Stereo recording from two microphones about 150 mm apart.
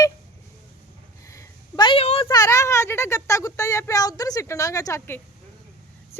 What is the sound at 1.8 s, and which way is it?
Speech, 40° left (ahead or behind).